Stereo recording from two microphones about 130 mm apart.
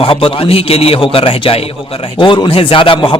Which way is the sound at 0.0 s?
45° left (ahead or behind).